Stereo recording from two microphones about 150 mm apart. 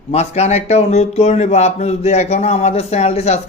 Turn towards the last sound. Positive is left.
turn(degrees=45)  # may be behind; listen again after turning